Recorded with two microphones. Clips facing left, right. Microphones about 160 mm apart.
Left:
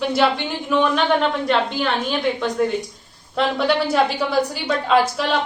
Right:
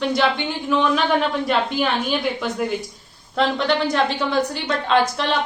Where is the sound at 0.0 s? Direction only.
5° left (ahead or behind).